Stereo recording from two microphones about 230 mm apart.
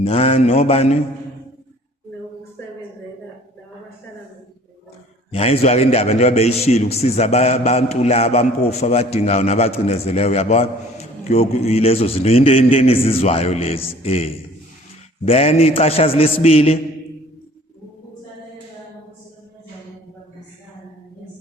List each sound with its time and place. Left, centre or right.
0.0 s a man's voice: left
5.3 s a man's voice: left